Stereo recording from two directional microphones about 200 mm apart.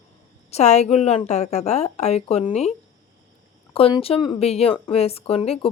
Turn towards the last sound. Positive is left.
turn(degrees=30)  # may be behind; listen again after turning